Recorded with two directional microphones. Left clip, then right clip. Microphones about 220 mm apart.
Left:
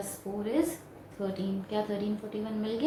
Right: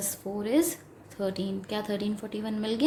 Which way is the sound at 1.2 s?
45° right (ahead or behind).